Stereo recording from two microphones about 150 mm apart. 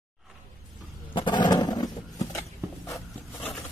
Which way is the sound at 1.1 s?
30° left (ahead or behind).